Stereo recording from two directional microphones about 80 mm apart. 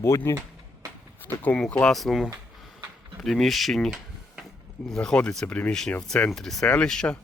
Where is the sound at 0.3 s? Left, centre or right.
Left.